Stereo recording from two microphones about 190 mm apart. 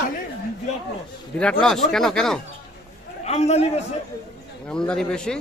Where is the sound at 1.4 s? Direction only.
5° left (ahead or behind).